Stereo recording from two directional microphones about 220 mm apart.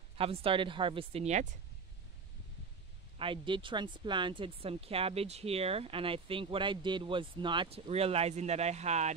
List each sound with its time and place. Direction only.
0.2 s speech: 25° right (ahead or behind)
3.2 s speech: 25° right (ahead or behind)